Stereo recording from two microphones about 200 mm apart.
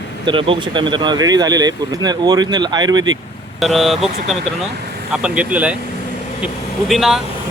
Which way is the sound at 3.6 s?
Centre (ahead or behind).